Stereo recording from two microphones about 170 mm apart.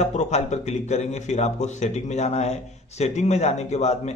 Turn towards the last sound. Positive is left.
turn(degrees=40)  # may be behind; listen again after turning